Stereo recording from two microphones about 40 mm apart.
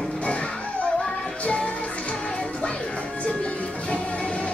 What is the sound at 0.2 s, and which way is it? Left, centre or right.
Music, left.